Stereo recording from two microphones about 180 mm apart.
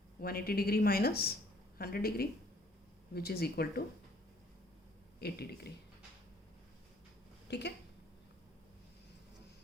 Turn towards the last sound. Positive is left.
turn(degrees=70)  # may be behind; listen again after turning